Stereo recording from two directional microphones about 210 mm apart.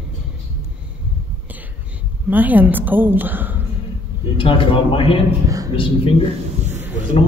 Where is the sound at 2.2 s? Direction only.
10° right (ahead or behind).